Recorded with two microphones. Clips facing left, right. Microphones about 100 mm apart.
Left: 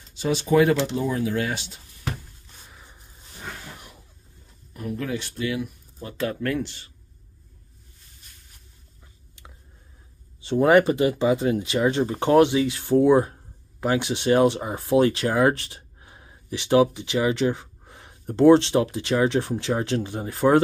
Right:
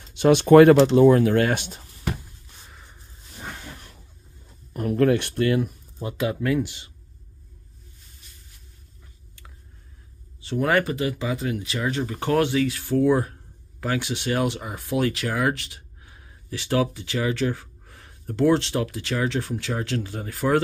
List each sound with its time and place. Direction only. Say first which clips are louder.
0.1 s speech: right 7 dB; 65° right (ahead or behind)
2.6 s a sound: even; centre (ahead or behind)
4.7 s speech: right 9 dB; 60° right (ahead or behind)
5.9 s speech: right 2 dB; 15° right (ahead or behind)
10.4 s speech: left 5 dB; 25° left (ahead or behind)